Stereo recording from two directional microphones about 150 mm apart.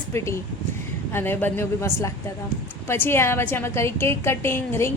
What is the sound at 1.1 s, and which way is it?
A woman's voice, 15° left (ahead or behind).